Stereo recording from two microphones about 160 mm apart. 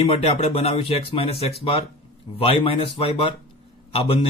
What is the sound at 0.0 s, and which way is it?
A man's voice, 40° left (ahead or behind).